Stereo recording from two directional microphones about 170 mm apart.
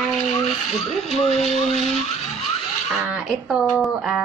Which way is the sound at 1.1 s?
40° left (ahead or behind).